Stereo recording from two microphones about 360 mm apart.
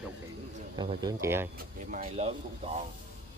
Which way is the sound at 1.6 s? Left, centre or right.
Right.